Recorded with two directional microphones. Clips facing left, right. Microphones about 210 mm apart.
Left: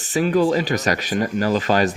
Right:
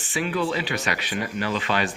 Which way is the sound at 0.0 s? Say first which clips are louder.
Left 8 dB; 40° left (ahead or behind).